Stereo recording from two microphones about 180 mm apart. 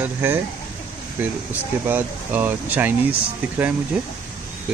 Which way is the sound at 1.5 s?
10° right (ahead or behind).